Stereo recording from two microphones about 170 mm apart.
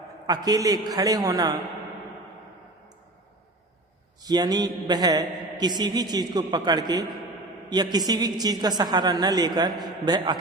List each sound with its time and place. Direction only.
0.3 s a man's voice: 20° right (ahead or behind)
4.2 s a man's voice: 20° right (ahead or behind)